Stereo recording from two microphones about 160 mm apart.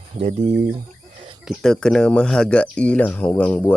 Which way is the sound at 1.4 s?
5° left (ahead or behind).